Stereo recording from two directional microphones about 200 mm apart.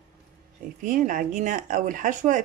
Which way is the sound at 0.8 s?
40° right (ahead or behind).